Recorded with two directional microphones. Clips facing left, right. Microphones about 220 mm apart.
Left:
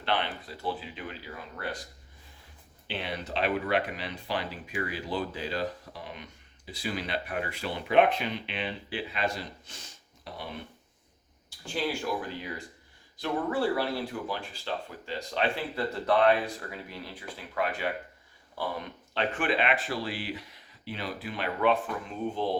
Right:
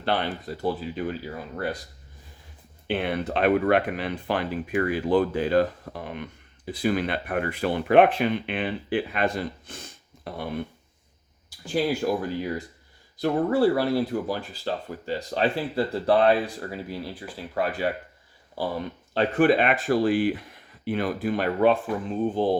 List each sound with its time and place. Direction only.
0.0 s speech: 40° right (ahead or behind)
2.8 s speech: 55° right (ahead or behind)
11.4 s speech: 40° right (ahead or behind)
13.2 s speech: 40° right (ahead or behind)
19.1 s speech: 40° right (ahead or behind)